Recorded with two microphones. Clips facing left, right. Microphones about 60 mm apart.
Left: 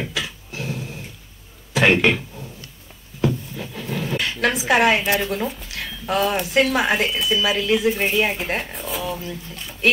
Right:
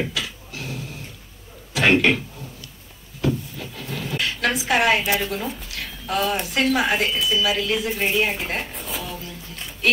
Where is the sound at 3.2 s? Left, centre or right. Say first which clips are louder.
Left 2 dB; left.